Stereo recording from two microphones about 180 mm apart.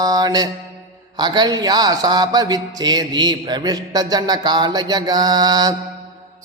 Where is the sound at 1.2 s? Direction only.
25° right (ahead or behind).